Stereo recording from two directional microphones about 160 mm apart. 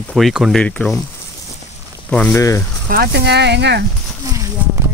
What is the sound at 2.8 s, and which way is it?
Speech, 75° right (ahead or behind).